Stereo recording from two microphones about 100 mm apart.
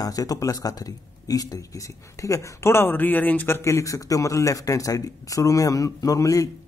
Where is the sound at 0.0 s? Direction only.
40° left (ahead or behind).